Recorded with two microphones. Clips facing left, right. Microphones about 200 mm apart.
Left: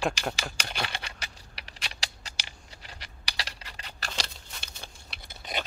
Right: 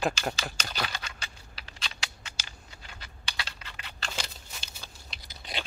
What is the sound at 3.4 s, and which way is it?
Scratch, 35° left (ahead or behind).